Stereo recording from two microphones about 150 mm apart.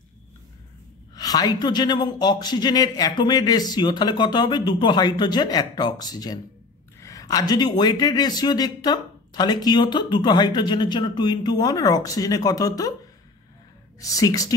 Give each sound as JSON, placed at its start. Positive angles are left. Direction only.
{"t": 1.1, "sound": "a man's voice", "side_deg": 25}
{"t": 13.9, "sound": "a man's voice", "side_deg": 25}